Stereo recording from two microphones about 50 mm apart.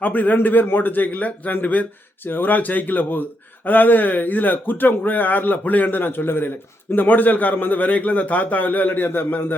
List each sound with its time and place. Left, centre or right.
0.0 s a man's voice: left
2.2 s a man's voice: left